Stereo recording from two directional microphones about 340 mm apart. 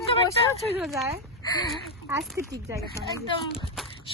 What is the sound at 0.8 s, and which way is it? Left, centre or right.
Speech, centre.